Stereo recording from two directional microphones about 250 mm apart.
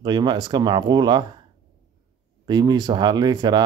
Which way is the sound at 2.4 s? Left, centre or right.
Centre.